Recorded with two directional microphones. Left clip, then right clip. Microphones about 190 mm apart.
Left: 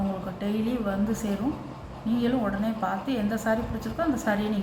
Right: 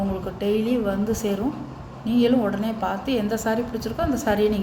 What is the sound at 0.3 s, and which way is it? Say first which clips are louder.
A woman's voice: right 10 dB; 45° right (ahead or behind).